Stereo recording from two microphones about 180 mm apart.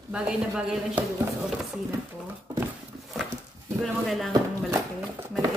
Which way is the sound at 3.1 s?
Centre (ahead or behind).